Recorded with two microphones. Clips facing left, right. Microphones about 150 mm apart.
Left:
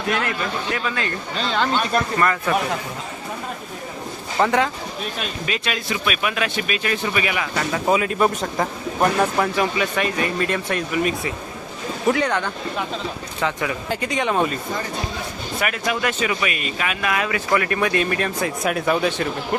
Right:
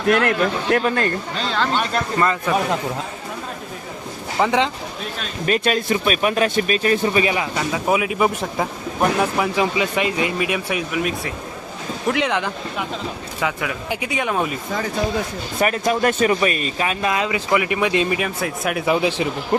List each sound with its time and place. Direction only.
0.1 s a man's voice: 60° right (ahead or behind)
1.4 s speech: centre (ahead or behind)
2.1 s speech: 20° right (ahead or behind)
4.4 s a man's voice: 10° right (ahead or behind)
5.5 s speech: 45° right (ahead or behind); by 7.4 s 30° right (ahead or behind)
7.5 s speech: 10° right (ahead or behind)
13.4 s speech: 5° right (ahead or behind)
15.6 s speech: 35° right (ahead or behind); by 18.2 s 20° right (ahead or behind)
18.2 s speech: 5° right (ahead or behind)
19.2 s speech: 15° right (ahead or behind)